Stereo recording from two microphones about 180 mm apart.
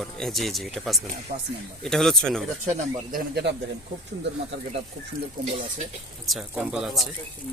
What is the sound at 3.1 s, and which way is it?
Speech, 60° right (ahead or behind).